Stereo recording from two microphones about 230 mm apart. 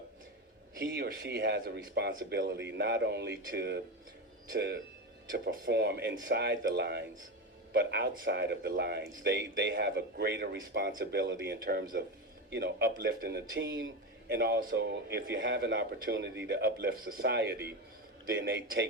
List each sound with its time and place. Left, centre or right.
0.8 s speech: right